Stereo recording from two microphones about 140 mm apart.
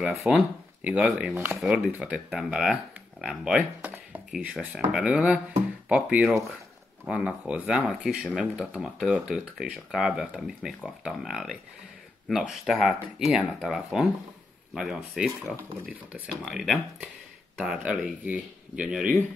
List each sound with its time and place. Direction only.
0.0 s speech: centre (ahead or behind)
1.3 s speech: 15° right (ahead or behind)
2.0 s speech: 5° right (ahead or behind)
16.4 s speech: centre (ahead or behind)